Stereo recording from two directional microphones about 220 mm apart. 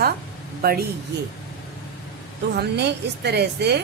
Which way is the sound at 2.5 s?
50° right (ahead or behind).